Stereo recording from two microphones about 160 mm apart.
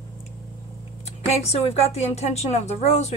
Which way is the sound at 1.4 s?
40° left (ahead or behind).